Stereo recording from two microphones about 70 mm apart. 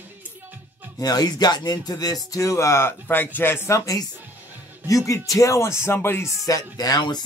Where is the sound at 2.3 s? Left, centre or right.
Left.